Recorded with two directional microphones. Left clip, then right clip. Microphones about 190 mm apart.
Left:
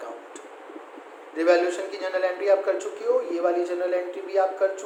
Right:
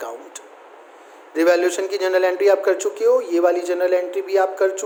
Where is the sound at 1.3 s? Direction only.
60° right (ahead or behind).